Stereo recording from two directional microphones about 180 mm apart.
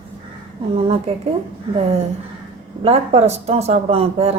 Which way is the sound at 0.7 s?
35° right (ahead or behind).